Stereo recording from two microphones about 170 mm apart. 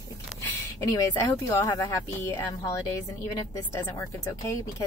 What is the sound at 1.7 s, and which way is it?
Speech, 15° left (ahead or behind).